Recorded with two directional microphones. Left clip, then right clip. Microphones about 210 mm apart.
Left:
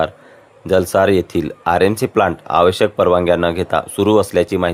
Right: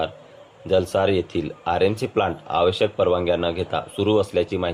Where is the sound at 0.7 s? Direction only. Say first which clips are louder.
Left 6 dB; 50° left (ahead or behind).